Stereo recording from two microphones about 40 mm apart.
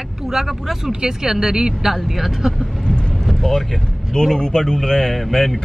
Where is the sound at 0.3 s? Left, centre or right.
Centre.